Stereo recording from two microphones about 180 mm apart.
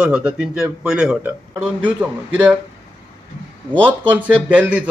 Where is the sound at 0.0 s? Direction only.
5° right (ahead or behind).